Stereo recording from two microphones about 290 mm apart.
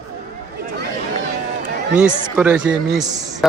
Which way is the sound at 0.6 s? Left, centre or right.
Right.